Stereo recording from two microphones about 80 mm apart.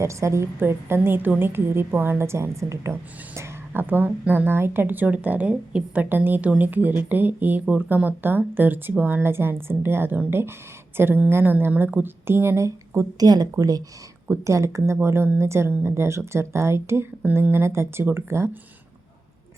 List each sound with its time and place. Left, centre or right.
0.0 s a woman's voice: right
3.7 s a woman's voice: right
13.1 s speech: right
14.3 s speech: right